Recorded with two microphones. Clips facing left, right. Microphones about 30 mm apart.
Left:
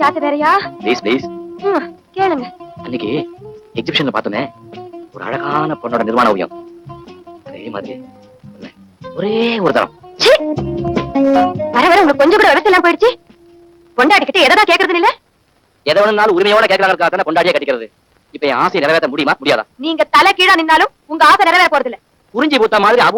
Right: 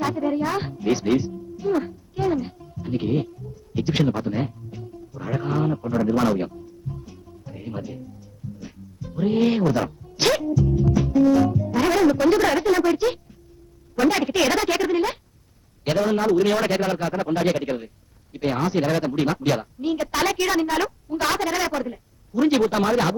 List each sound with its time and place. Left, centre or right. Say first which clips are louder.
0.0 s speech: left 11 dB; left